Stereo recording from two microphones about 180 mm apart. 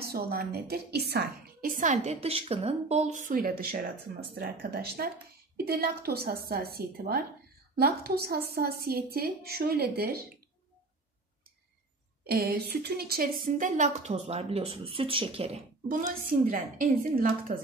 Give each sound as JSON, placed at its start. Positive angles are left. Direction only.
{"t": 0.0, "sound": "a woman's voice", "side_deg": -60}
{"t": 12.3, "sound": "a woman's voice", "side_deg": -55}
{"t": 15.9, "sound": "a woman's voice", "side_deg": -50}